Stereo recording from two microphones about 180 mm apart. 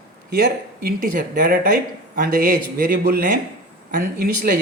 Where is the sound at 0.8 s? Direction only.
50° right (ahead or behind).